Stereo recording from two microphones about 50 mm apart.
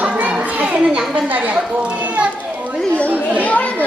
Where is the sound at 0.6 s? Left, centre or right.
Right.